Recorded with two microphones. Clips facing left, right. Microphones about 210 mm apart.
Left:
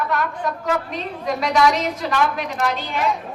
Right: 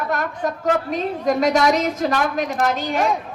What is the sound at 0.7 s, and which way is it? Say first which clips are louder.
A woman's voice: right 4 dB; 45° right (ahead or behind).